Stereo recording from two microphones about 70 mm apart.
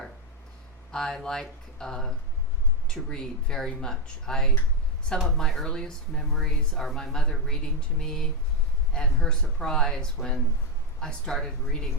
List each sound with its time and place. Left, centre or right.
0.9 s speech: centre